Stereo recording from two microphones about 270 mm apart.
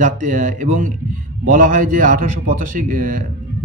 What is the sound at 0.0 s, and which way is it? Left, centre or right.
A man's voice, right.